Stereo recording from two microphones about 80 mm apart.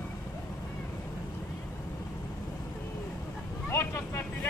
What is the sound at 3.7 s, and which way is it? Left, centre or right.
Vehicle, left.